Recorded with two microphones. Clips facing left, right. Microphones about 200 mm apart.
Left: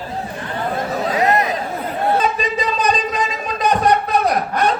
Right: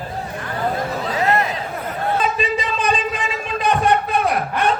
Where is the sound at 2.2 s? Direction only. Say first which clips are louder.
Left 1 dB; 40° left (ahead or behind).